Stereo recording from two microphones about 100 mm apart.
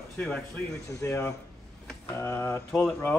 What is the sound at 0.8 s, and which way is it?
Speech, 30° left (ahead or behind).